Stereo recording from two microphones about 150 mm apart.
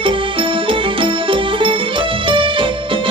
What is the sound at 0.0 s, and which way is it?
Music, 35° right (ahead or behind).